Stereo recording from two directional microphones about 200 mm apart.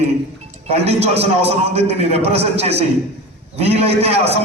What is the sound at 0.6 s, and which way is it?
A man's voice, 30° right (ahead or behind).